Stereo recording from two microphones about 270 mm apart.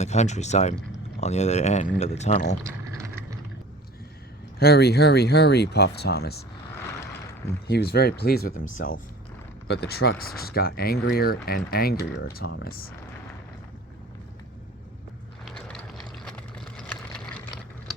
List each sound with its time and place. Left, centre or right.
0.0 s speech: left
2.6 s vehicle: centre
4.6 s speech: left
7.7 s speech: left
15.4 s vehicle: centre